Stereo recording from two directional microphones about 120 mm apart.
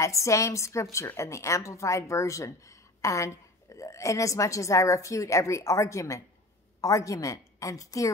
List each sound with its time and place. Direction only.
0.0 s a woman's voice: 25° left (ahead or behind)